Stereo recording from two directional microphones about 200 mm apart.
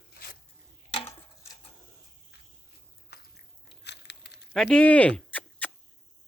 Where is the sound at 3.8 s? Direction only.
60° left (ahead or behind).